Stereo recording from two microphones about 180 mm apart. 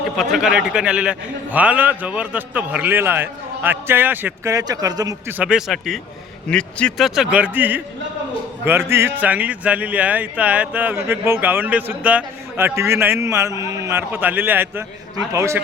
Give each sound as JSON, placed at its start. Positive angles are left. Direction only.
{"t": 0.2, "sound": "a man's voice", "side_deg": 0}
{"t": 5.4, "sound": "a man's voice", "side_deg": -5}